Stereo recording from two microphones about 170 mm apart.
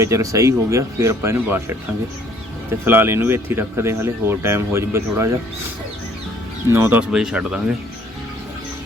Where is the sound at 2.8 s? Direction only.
10° right (ahead or behind).